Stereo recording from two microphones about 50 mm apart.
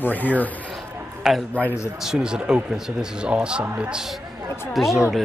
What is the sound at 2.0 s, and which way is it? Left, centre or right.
Speech, centre.